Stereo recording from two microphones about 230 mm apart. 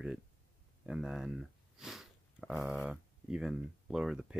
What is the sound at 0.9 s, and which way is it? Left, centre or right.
Speech, centre.